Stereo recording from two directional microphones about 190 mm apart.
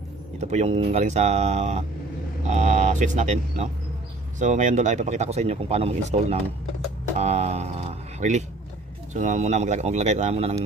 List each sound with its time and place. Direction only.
0.4 s speech: 35° right (ahead or behind)